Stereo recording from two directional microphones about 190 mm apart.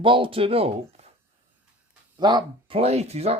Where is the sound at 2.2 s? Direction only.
20° right (ahead or behind).